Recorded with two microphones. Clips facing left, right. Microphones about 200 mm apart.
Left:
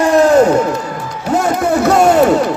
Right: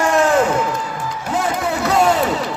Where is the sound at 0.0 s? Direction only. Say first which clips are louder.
Left 6 dB; 35° left (ahead or behind).